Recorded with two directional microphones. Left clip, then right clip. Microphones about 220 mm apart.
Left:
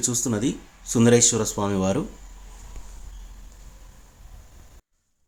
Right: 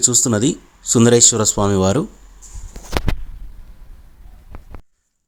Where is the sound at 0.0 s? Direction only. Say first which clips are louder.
Right 9 dB; 35° right (ahead or behind).